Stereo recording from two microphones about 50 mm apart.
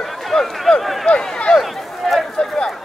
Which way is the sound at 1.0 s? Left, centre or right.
Centre.